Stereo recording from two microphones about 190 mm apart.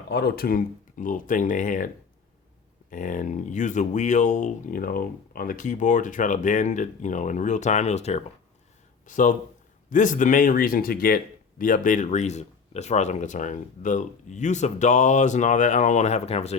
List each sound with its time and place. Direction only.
0.1 s speech: 60° left (ahead or behind); by 1.9 s 45° left (ahead or behind)
2.9 s speech: 45° left (ahead or behind)